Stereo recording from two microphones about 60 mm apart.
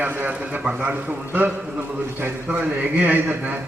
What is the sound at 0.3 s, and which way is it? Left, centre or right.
A man's voice, centre.